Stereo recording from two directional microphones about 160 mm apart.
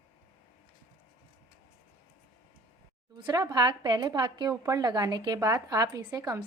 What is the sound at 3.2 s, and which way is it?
A woman's voice, 25° right (ahead or behind).